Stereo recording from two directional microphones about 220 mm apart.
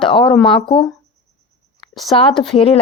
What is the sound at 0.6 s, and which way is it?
Speech, 20° left (ahead or behind).